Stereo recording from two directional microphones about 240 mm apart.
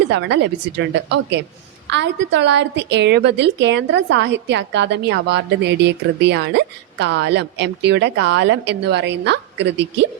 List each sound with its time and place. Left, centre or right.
0.1 s a woman's voice: right